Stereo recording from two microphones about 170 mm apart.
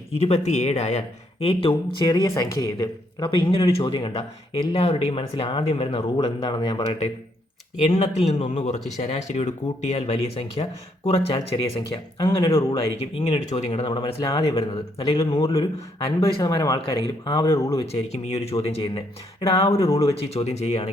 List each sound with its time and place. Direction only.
0.1 s speech: 40° left (ahead or behind)
2.0 s speech: 20° left (ahead or behind); by 6.2 s 35° left (ahead or behind)
6.2 s speech: 25° left (ahead or behind)
7.9 s speech: 35° left (ahead or behind)
12.1 s speech: 20° left (ahead or behind)
13.1 s speech: 35° left (ahead or behind)
14.4 s speech: 35° left (ahead or behind)
15.2 s speech: 20° left (ahead or behind)
17.9 s speech: 40° left (ahead or behind)
19.7 s speech: 15° left (ahead or behind)
20.3 s speech: 40° left (ahead or behind)